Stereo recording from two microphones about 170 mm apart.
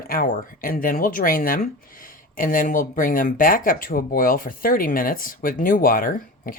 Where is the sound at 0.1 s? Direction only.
55° left (ahead or behind).